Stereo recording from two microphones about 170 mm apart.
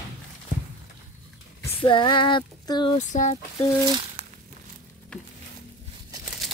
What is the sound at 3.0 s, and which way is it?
Speech, 45° left (ahead or behind).